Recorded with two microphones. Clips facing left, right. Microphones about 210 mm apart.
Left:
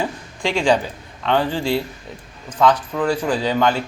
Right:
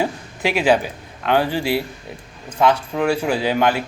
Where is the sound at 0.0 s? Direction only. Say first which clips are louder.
Right 2 dB; 5° right (ahead or behind).